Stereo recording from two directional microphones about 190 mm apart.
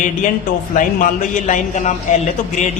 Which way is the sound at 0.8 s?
45° left (ahead or behind).